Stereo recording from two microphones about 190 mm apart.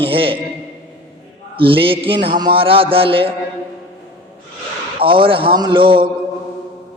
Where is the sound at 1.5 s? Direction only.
25° right (ahead or behind).